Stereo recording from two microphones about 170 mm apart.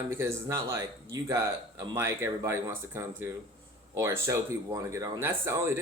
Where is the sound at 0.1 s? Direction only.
15° right (ahead or behind).